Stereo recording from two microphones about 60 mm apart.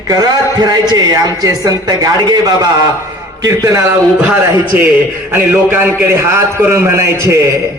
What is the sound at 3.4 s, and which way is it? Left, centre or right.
Speech, right.